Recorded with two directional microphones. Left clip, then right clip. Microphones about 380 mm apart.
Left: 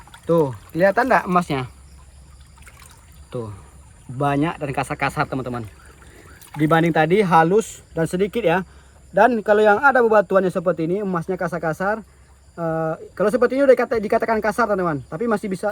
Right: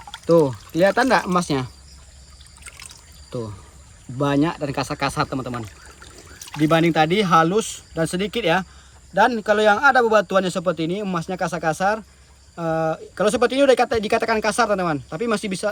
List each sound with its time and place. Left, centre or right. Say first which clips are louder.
0.3 s speech: right 2 dB; right
4.4 s speech: right 1 dB; right
6.6 s speech: even; centre
7.1 s speech: left 4 dB; right
7.4 s speech: left 3 dB; centre